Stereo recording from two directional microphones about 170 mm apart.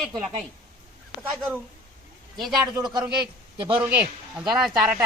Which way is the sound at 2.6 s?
25° right (ahead or behind).